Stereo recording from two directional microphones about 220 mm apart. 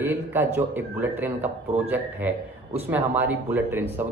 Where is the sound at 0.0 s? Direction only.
10° right (ahead or behind).